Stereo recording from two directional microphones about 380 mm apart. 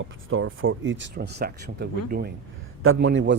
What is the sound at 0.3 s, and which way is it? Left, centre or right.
Speech, right.